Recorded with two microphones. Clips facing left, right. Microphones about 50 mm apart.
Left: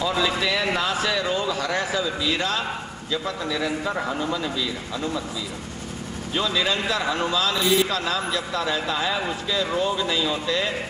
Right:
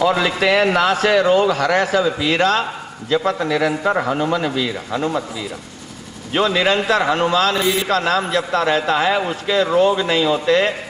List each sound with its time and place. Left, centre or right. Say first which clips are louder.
0.0 s a man's voice: right 7 dB; right
6.3 s a man's voice: right 7 dB; right